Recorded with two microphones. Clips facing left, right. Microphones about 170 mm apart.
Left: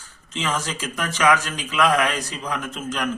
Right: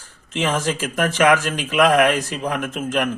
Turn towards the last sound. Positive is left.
turn(degrees=-55)  # may be behind; listen again after turning